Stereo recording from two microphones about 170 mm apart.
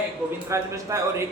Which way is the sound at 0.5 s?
15° right (ahead or behind).